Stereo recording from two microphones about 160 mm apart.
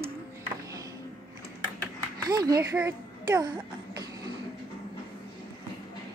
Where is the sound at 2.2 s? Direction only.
25° right (ahead or behind).